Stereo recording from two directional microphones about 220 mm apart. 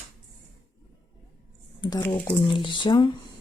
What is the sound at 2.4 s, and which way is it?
Speech, 20° left (ahead or behind).